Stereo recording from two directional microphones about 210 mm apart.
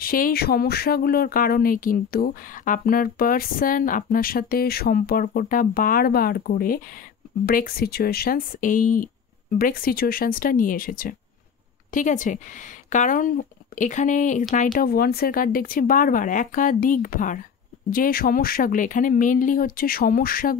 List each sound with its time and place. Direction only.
0.0 s speech: 45° left (ahead or behind)